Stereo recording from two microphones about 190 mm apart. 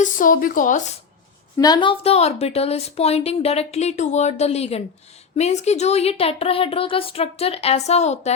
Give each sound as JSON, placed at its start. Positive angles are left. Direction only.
{"t": 0.0, "sound": "speech", "side_deg": 45}
{"t": 1.5, "sound": "a woman's voice", "side_deg": 20}